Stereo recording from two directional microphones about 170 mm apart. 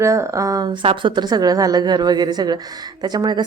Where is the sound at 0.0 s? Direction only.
15° right (ahead or behind).